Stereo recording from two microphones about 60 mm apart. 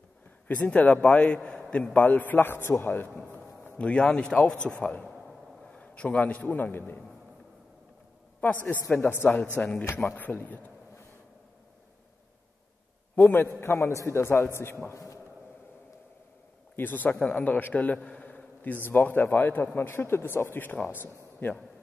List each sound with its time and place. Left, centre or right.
0.5 s a man's voice: left
2.0 s speech: left
3.3 s a sound: left
3.8 s speech: centre
4.6 s a man's voice: centre
8.4 s a man's voice: left
10.0 s a man's voice: left
13.1 s a man's voice: left
13.6 s a man's voice: left
16.7 s a man's voice: left
20.6 s a man's voice: left